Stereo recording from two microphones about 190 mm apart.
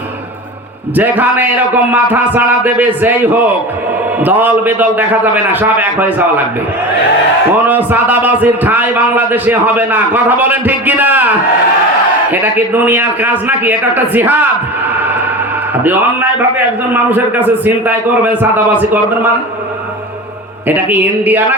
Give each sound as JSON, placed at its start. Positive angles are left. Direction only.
{"t": 0.9, "sound": "a man's voice", "side_deg": -10}
{"t": 7.7, "sound": "a man's voice", "side_deg": -10}
{"t": 12.3, "sound": "a man's voice", "side_deg": -10}
{"t": 16.9, "sound": "a man's voice", "side_deg": -10}
{"t": 20.7, "sound": "a man's voice", "side_deg": -10}